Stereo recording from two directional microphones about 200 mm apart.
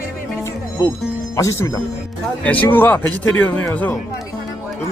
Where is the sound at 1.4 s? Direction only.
15° left (ahead or behind).